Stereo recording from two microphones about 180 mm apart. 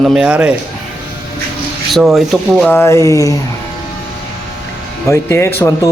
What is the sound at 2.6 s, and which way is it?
Speech, 15° left (ahead or behind).